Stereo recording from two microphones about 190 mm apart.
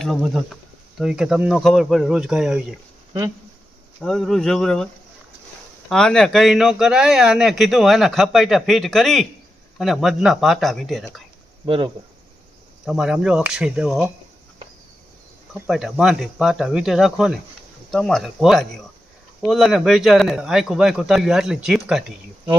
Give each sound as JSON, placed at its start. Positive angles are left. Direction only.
{"t": 0.0, "sound": "speech", "side_deg": 0}
{"t": 3.1, "sound": "speech", "side_deg": -20}
{"t": 4.0, "sound": "speech", "side_deg": 0}
{"t": 5.9, "sound": "speech", "side_deg": 5}
{"t": 11.6, "sound": "speech", "side_deg": -25}
{"t": 12.8, "sound": "speech", "side_deg": 0}
{"t": 15.5, "sound": "speech", "side_deg": -5}